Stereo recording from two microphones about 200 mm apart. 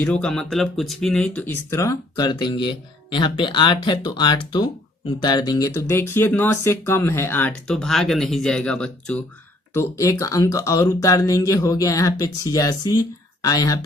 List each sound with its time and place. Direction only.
0.0 s speech: 5° left (ahead or behind)
9.7 s speech: 15° left (ahead or behind)